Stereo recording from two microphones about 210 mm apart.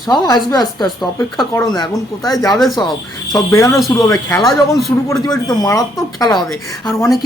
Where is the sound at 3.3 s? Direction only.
15° left (ahead or behind).